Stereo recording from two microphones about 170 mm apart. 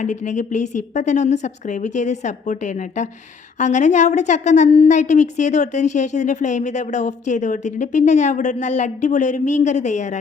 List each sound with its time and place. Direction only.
0.0 s a woman's voice: 45° left (ahead or behind)